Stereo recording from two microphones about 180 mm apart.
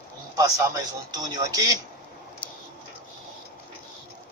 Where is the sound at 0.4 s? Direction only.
20° right (ahead or behind).